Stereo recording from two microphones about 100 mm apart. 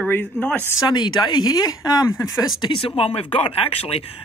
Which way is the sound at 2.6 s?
60° left (ahead or behind).